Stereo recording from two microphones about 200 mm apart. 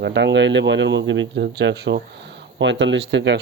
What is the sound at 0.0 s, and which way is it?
Speech, 60° right (ahead or behind).